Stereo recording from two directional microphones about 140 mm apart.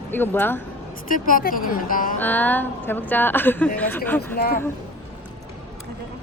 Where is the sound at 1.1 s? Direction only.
75° left (ahead or behind).